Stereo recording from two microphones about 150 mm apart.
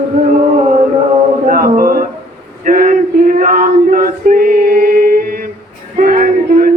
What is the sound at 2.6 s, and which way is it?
Male singing, 60° right (ahead or behind).